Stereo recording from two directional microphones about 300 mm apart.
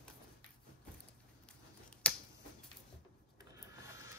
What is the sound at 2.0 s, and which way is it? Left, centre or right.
Finger snapping, centre.